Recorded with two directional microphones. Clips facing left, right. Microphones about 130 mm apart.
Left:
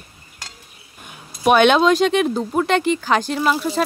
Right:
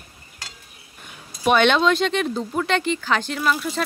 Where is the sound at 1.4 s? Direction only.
45° left (ahead or behind).